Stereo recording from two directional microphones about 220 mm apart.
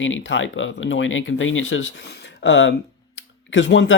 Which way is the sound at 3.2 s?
55° left (ahead or behind).